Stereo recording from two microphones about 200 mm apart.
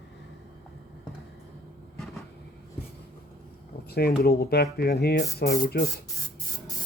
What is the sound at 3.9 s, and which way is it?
Speech, 50° left (ahead or behind).